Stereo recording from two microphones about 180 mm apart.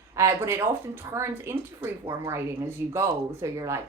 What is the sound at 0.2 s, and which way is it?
A woman's voice, 15° right (ahead or behind).